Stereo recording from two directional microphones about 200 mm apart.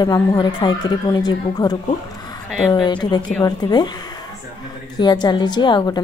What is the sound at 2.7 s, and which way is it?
A woman's voice, 20° left (ahead or behind).